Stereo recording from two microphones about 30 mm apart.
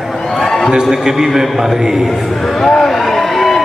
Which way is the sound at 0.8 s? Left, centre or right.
Centre.